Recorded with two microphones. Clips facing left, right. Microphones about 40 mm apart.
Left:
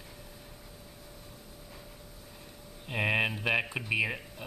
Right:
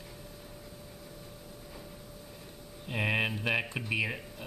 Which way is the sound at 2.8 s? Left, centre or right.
Centre.